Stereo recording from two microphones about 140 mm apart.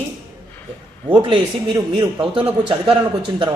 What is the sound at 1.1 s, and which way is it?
A man's voice, 35° right (ahead or behind).